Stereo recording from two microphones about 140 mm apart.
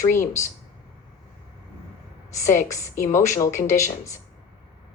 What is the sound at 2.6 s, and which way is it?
Speech, 20° left (ahead or behind).